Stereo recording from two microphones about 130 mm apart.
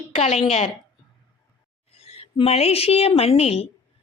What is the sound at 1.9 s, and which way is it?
A woman's voice, 50° left (ahead or behind).